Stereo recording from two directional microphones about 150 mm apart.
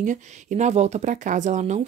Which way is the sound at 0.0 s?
55° right (ahead or behind).